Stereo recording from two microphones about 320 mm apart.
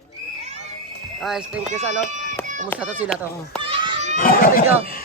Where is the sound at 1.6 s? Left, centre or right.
Right.